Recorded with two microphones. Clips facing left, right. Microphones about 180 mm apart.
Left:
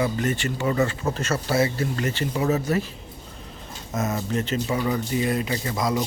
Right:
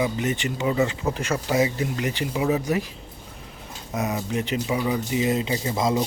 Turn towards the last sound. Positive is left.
turn(degrees=-25)  # may be behind; listen again after turning